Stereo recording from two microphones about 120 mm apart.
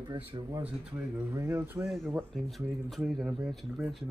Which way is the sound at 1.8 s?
Centre (ahead or behind).